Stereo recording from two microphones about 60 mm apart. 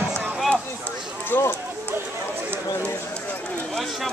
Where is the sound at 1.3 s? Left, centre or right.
Left.